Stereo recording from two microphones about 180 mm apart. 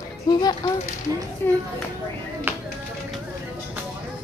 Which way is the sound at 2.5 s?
10° right (ahead or behind).